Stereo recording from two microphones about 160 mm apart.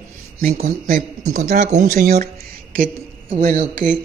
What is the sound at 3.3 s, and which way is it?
Speech, 55° right (ahead or behind).